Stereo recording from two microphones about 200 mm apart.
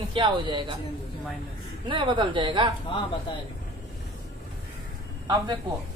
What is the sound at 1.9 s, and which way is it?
Speech, 25° right (ahead or behind).